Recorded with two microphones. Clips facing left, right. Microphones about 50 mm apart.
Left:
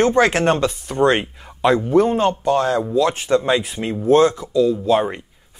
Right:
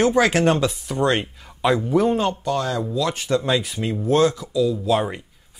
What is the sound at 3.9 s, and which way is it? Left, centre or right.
Speech, centre.